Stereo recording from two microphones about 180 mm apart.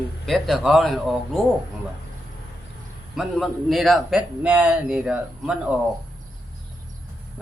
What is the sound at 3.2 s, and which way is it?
A man's voice, centre (ahead or behind).